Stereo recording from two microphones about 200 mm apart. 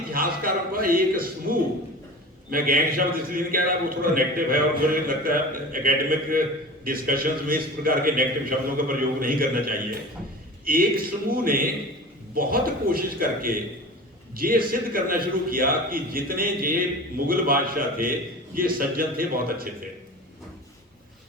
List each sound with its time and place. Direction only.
0.1 s a man's voice: 45° right (ahead or behind)